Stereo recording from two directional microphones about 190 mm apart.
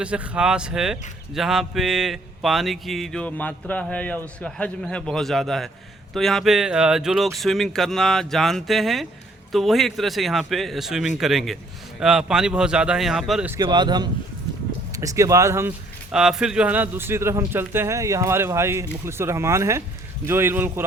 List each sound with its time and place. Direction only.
0.0 s speech: 5° right (ahead or behind)
13.6 s a man's voice: 25° right (ahead or behind)
16.1 s a man's voice: 5° right (ahead or behind)